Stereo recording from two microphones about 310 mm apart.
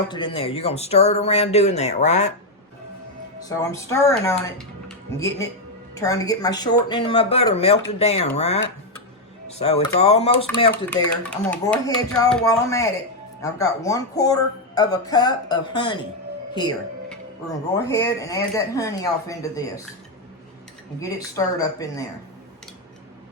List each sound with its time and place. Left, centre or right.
0.1 s speech: centre
3.6 s speech: centre
10.4 s speech: centre
17.7 s speech: centre
21.0 s speech: centre